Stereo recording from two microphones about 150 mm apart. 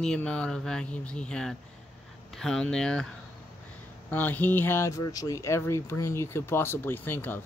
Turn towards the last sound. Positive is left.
turn(degrees=15)  # may be behind; listen again after turning